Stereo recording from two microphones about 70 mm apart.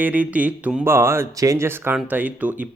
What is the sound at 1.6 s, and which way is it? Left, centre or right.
Speech, right.